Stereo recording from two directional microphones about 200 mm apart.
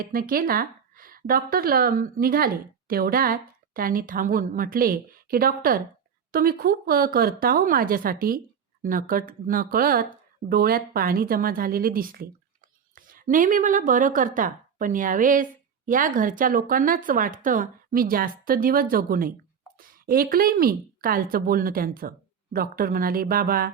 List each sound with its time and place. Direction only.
0.0 s a woman's voice: 45° right (ahead or behind)